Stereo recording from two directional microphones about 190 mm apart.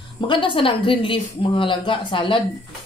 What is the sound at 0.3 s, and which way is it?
Speech, 25° left (ahead or behind).